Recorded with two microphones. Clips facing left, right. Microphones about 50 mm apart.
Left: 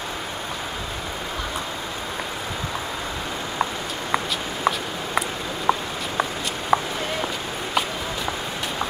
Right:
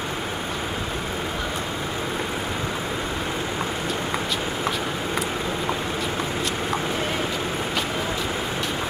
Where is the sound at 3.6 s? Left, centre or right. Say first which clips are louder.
Even; centre.